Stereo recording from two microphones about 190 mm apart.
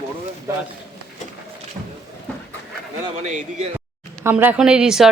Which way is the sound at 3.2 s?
40° right (ahead or behind).